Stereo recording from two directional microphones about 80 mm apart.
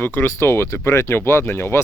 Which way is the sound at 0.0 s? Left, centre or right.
Left.